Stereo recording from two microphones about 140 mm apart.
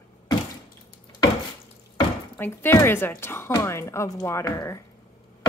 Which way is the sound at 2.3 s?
15° left (ahead or behind).